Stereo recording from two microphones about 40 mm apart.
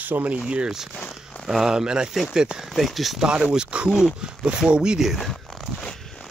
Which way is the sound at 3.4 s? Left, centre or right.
Right.